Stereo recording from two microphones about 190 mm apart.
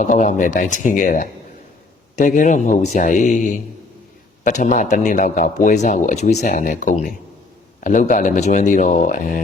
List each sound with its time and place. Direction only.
0.0 s speech: 40° left (ahead or behind)